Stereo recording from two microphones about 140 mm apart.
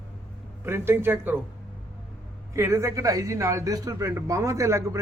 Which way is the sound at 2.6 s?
20° right (ahead or behind).